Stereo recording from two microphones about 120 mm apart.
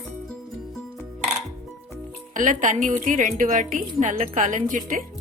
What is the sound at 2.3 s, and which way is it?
A woman's voice, 90° right.